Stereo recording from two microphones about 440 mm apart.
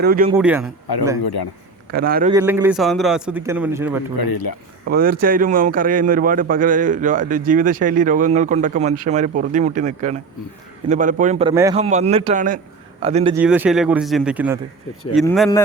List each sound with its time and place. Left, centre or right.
0.0 s a man's voice: centre
0.3 s a man's voice: centre
0.9 s speech: left
1.9 s a man's voice: centre
2.3 s a man's voice: centre
4.2 s speech: left
4.9 s a man's voice: centre